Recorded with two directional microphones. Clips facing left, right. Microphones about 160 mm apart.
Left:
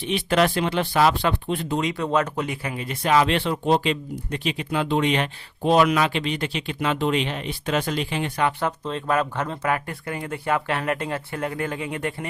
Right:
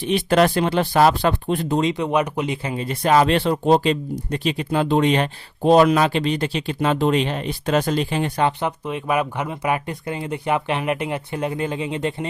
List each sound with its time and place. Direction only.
0.0 s speech: 40° right (ahead or behind)
1.8 s speech: 20° right (ahead or behind); by 8.4 s 40° right (ahead or behind)
8.8 s speech: 15° right (ahead or behind)